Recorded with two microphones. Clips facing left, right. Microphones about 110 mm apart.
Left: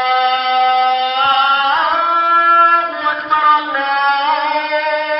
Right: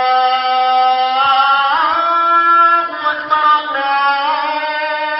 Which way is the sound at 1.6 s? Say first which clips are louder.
Even; 25° right (ahead or behind).